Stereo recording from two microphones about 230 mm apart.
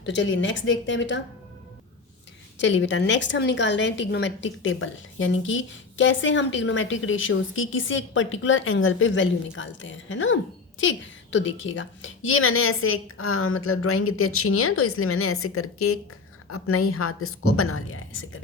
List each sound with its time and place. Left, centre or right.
0.0 s a woman's voice: left
2.6 s a woman's voice: left